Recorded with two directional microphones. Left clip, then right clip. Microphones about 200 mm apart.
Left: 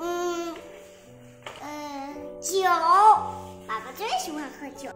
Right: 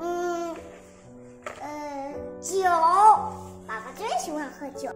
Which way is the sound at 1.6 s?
10° right (ahead or behind).